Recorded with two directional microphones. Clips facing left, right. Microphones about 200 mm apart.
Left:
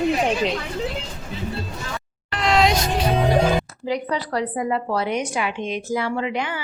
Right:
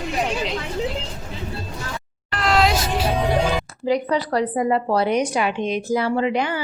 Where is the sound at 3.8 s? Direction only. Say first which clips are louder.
Right 4 dB; 40° right (ahead or behind).